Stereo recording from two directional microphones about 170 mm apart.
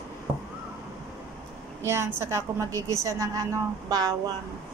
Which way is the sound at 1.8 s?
15° right (ahead or behind).